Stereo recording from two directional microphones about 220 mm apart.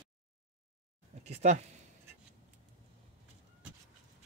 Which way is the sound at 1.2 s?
30° right (ahead or behind).